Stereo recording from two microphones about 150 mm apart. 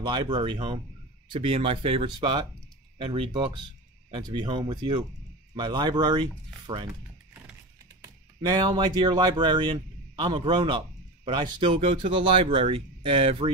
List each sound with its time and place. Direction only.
0.0 s speech: 30° right (ahead or behind)
8.0 s speech: 25° right (ahead or behind)